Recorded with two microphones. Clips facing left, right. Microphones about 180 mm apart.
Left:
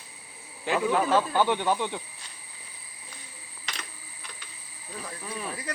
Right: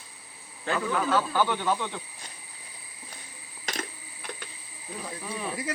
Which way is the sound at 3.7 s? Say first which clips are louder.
Right 7 dB; 50° right (ahead or behind).